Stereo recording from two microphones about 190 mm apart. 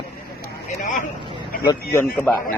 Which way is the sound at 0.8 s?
40° left (ahead or behind).